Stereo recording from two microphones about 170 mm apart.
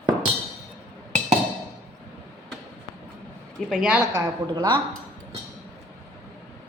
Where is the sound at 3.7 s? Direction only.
5° right (ahead or behind).